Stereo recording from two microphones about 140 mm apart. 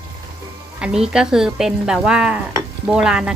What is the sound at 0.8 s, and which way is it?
A woman's voice, 5° right (ahead or behind).